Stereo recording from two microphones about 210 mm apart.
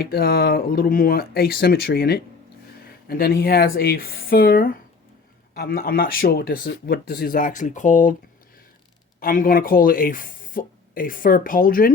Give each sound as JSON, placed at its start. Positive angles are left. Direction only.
{"t": 0.0, "sound": "speech", "side_deg": 45}
{"t": 9.2, "sound": "speech", "side_deg": 40}